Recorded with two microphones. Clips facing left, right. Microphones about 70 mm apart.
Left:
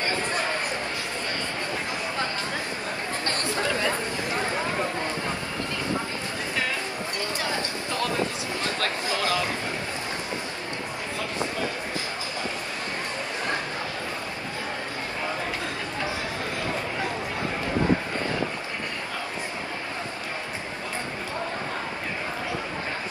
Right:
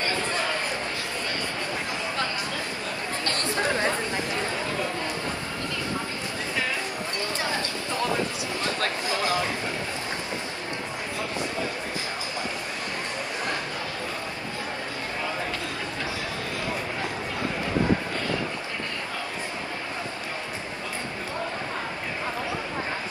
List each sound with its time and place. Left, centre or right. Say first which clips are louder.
0.0 s chatter: even; left
3.6 s chatter: right 1 dB; right
3.9 s chatter: even; left
7.9 s a sound: even; right